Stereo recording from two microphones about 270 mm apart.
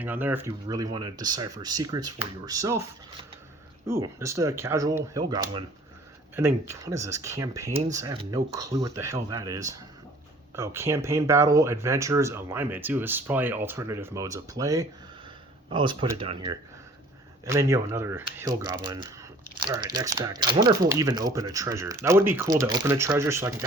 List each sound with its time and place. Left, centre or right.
0.0 s speech: centre